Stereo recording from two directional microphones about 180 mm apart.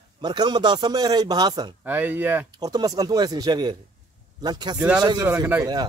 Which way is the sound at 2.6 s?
20° right (ahead or behind).